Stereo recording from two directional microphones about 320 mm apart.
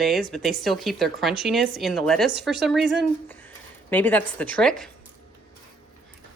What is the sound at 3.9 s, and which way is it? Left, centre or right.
Speech, centre.